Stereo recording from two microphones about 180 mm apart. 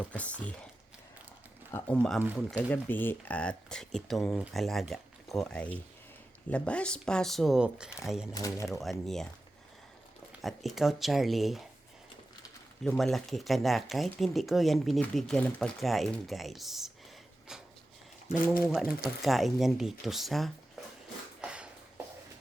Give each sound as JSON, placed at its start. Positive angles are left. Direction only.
{"t": 0.0, "sound": "speech", "side_deg": 5}
{"t": 1.7, "sound": "speech", "side_deg": 5}
{"t": 8.3, "sound": "speech", "side_deg": 20}
{"t": 8.6, "sound": "speech", "side_deg": 0}
{"t": 10.8, "sound": "speech", "side_deg": 0}
{"t": 12.8, "sound": "speech", "side_deg": 0}
{"t": 17.5, "sound": "a sound", "side_deg": -5}
{"t": 18.7, "sound": "speech", "side_deg": 0}
{"t": 21.4, "sound": "a sound", "side_deg": -5}